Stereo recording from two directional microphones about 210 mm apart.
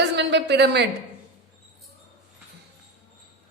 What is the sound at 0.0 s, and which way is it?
Speech, 55° right (ahead or behind).